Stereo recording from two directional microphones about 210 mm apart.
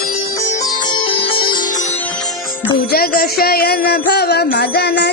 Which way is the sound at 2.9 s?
45° left (ahead or behind).